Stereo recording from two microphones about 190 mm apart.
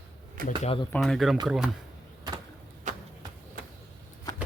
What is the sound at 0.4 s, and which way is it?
Speech, 30° left (ahead or behind).